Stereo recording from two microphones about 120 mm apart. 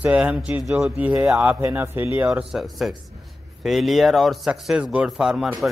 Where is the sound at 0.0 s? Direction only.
10° right (ahead or behind).